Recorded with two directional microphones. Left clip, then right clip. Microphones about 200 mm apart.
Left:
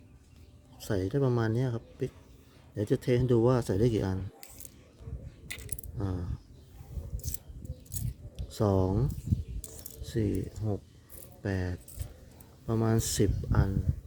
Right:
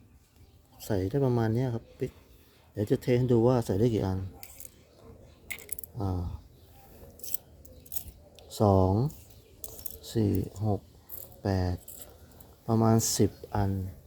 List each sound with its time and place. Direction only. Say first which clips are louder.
0.8 s speech: right 1 dB; centre (ahead or behind)
5.5 s mechanisms: right 2 dB; centre (ahead or behind)
7.9 s keys jangling: left 1 dB; centre (ahead or behind)
9.6 s coin: right 4 dB; 5° left (ahead or behind)
10.0 s keys jangling: right 3 dB; 5° right (ahead or behind)
11.4 s speech: right 4 dB; 5° right (ahead or behind)